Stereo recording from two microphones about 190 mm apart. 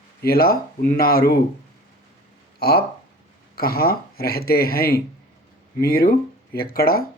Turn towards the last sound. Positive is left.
turn(degrees=55)  # may be behind; listen again after turning